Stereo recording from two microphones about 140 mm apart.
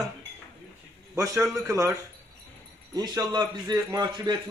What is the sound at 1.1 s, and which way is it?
Speech, 20° right (ahead or behind).